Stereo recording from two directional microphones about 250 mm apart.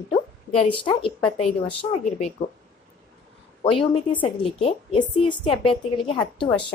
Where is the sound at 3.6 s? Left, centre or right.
Left.